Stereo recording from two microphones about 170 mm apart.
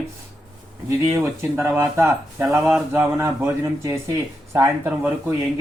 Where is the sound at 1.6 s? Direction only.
15° right (ahead or behind).